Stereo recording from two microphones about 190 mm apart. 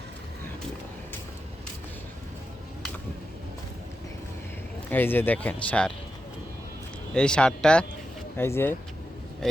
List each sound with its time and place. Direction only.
4.9 s speech: 10° left (ahead or behind)
7.1 s speech: 5° left (ahead or behind)